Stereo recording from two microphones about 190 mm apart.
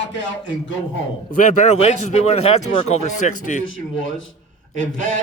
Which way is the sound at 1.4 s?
40° left (ahead or behind).